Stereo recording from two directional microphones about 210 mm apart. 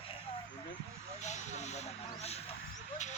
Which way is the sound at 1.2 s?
35° left (ahead or behind).